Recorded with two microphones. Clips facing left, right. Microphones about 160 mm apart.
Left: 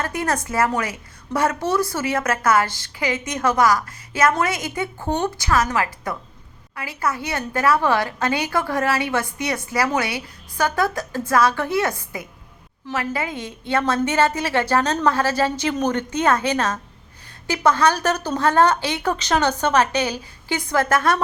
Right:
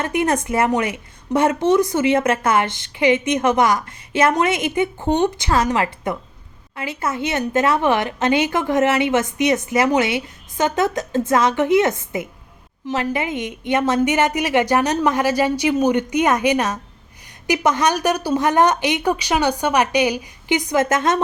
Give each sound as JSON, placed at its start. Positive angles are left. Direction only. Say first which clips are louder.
{"t": 0.0, "sound": "a woman's voice", "louder": "right 4 dB", "side_deg": -20}